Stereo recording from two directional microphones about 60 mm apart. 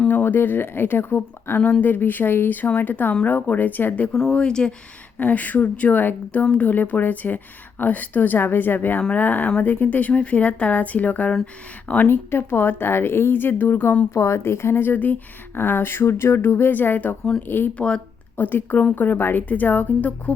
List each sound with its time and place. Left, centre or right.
0.1 s a woman's voice: left
4.3 s speech: centre
5.1 s a woman's voice: left
6.4 s speech: centre
6.7 s a woman's voice: left
12.0 s speech: left
14.1 s speech: left
17.7 s speech: centre
18.3 s speech: left